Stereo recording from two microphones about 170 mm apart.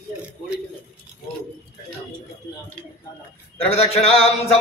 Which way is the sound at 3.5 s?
35° left (ahead or behind).